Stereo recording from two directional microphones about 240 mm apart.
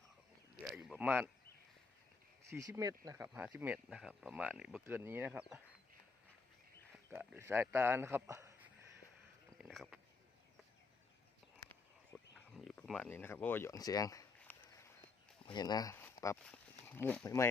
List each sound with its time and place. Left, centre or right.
0.6 s speech: centre
2.5 s speech: centre
6.9 s speech: centre
9.6 s speech: centre
11.7 s a sound: centre
15.4 s speech: centre